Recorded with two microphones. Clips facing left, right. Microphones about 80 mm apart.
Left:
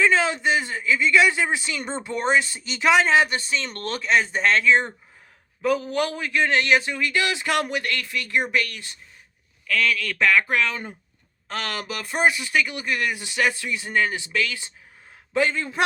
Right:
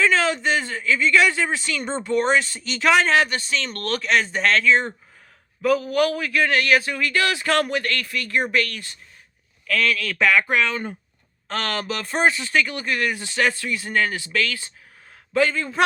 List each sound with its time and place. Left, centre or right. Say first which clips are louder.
0.0 s a sound: even; centre
2.0 s speech: right 2 dB; centre
5.6 s a man's voice: right 3 dB; left
9.6 s a man's voice: right 1 dB; centre; by 15.8 s left